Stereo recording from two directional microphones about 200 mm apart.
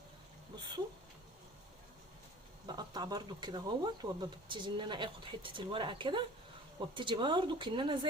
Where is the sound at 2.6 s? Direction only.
20° right (ahead or behind).